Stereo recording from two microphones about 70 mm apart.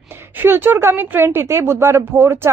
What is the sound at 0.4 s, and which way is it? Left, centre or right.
A woman's voice, right.